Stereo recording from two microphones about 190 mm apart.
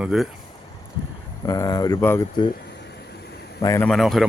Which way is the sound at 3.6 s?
15° left (ahead or behind).